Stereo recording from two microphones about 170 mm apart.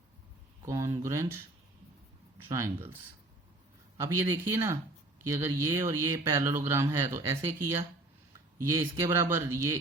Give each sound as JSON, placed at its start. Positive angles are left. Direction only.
{"t": 0.6, "sound": "speech", "side_deg": -15}
{"t": 2.5, "sound": "speech", "side_deg": -15}
{"t": 4.2, "sound": "speech", "side_deg": -15}